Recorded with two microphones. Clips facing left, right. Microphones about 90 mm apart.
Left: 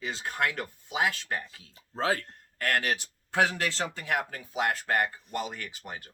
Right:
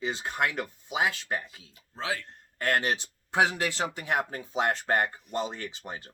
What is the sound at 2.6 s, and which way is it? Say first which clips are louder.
Speech: right 1 dB; 25° right (ahead or behind).